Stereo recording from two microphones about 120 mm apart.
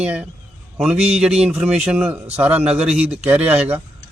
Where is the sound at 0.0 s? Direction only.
10° right (ahead or behind).